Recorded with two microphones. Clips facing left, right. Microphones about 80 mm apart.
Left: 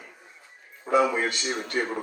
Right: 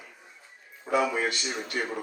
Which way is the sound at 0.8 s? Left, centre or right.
Left.